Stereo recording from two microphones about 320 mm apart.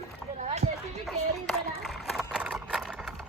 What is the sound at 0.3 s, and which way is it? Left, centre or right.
Run, right.